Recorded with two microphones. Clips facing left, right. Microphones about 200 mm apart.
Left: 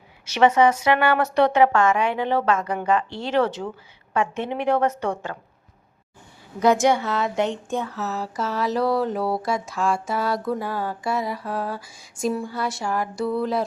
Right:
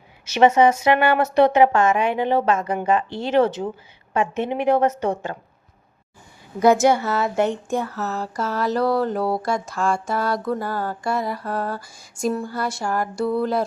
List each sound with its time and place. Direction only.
0.3 s a woman's voice: 25° right (ahead or behind)
6.6 s speech: 5° right (ahead or behind)